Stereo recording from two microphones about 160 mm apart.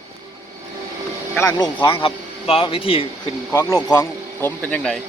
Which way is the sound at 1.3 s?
20° left (ahead or behind).